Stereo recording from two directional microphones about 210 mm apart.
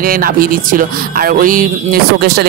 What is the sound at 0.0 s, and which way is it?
Speech, 45° right (ahead or behind).